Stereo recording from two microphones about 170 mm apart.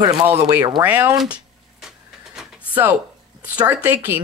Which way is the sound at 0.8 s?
10° right (ahead or behind).